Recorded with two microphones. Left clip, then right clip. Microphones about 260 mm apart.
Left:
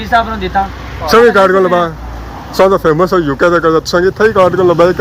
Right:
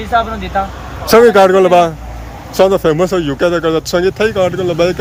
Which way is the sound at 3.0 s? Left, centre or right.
Right.